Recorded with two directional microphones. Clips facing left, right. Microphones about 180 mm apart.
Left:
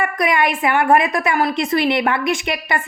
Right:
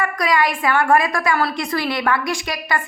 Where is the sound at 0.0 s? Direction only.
25° left (ahead or behind).